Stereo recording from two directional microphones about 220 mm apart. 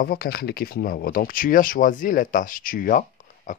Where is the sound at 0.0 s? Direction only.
45° left (ahead or behind).